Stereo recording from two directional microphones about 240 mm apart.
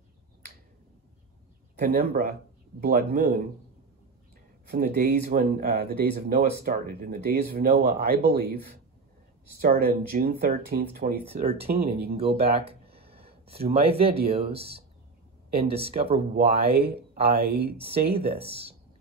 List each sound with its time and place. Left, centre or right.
1.8 s speech: right
4.6 s speech: right
9.6 s speech: right
12.2 s speech: right
17.3 s speech: right
17.7 s speech: right